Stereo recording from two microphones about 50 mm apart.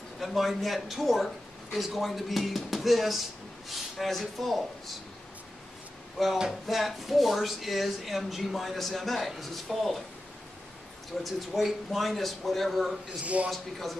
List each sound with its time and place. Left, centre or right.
0.2 s speech: centre
6.2 s speech: centre
11.2 s speech: centre
13.2 s a man's voice: right
13.5 s speech: centre